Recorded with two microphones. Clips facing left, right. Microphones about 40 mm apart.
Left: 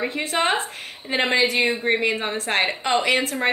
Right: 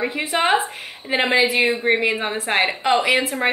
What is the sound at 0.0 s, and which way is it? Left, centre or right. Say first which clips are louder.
A woman's voice: right 2 dB; centre.